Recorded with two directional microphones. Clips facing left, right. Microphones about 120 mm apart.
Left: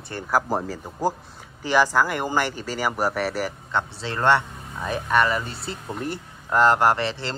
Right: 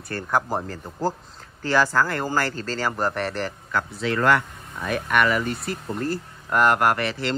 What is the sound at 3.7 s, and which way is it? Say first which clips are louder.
Speech: right 2 dB; 25° left (ahead or behind).